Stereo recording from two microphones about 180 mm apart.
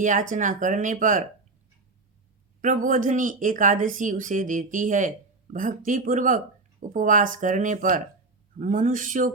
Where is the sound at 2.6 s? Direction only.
45° right (ahead or behind).